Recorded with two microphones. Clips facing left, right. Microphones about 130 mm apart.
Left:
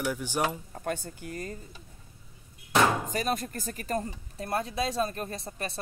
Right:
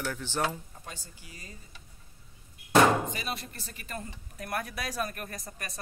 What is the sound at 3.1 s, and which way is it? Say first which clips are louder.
Speech: left 7 dB; 45° left (ahead or behind).